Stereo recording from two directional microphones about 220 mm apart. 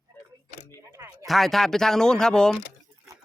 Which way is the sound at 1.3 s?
Centre (ahead or behind).